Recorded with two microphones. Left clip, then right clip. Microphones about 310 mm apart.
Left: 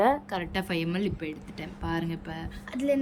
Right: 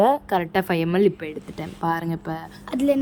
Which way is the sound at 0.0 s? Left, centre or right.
Right.